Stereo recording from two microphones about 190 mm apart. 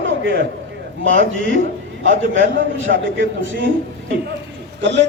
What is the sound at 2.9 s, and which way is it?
Speech, 85° right.